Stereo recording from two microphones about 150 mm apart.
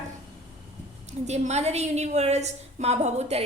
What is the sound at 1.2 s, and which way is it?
Speech, 50° right (ahead or behind).